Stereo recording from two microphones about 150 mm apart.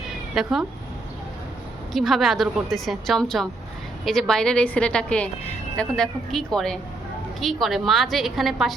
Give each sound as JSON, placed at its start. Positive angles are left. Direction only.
{"t": 0.4, "sound": "a woman's voice", "side_deg": 0}
{"t": 1.9, "sound": "a woman's voice", "side_deg": 0}